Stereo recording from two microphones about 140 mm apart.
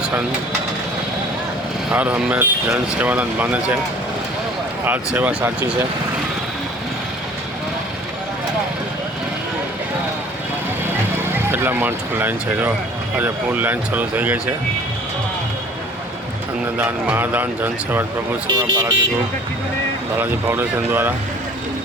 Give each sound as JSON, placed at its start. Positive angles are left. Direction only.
{"t": 1.9, "sound": "speech", "side_deg": -10}
{"t": 4.9, "sound": "speech", "side_deg": -15}
{"t": 11.5, "sound": "speech", "side_deg": -15}
{"t": 16.7, "sound": "speech", "side_deg": -15}
{"t": 18.4, "sound": "speech", "side_deg": -35}
{"t": 20.1, "sound": "speech", "side_deg": -15}